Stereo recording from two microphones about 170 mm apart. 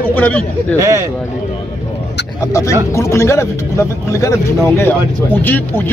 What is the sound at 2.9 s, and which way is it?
Speech, 15° left (ahead or behind).